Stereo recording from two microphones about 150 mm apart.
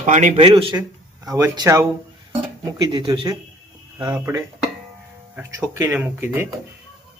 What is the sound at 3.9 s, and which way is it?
Speech, 15° right (ahead or behind).